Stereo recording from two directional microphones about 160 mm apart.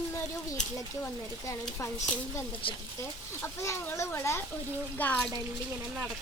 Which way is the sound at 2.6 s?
35° left (ahead or behind).